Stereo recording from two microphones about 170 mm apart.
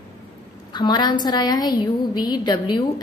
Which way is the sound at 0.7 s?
25° left (ahead or behind).